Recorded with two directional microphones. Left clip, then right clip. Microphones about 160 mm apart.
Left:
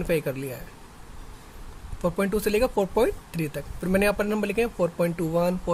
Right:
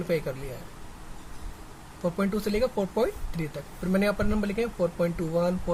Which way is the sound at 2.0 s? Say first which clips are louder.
Left 4 dB; 55° left (ahead or behind).